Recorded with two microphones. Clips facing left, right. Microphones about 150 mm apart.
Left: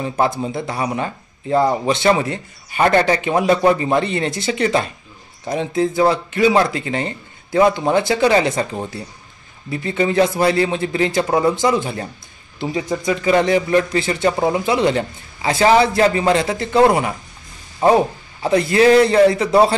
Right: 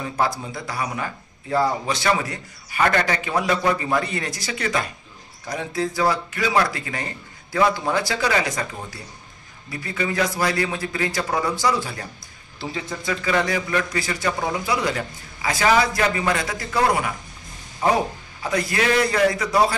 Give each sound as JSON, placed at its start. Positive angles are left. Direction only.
{"t": 0.0, "sound": "speech", "side_deg": 25}